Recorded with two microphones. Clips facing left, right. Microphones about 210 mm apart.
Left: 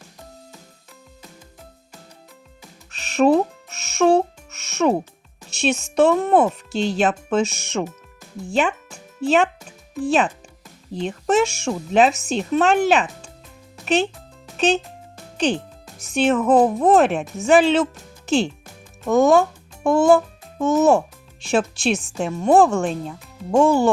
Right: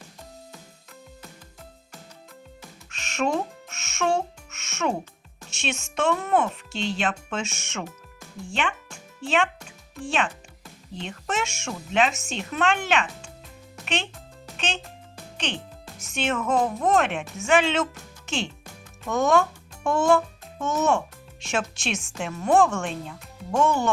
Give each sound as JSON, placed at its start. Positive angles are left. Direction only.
{"t": 2.9, "sound": "music", "side_deg": 35}
{"t": 5.5, "sound": "speech", "side_deg": 35}
{"t": 14.5, "sound": "music", "side_deg": 40}
{"t": 16.0, "sound": "a child's voice", "side_deg": 35}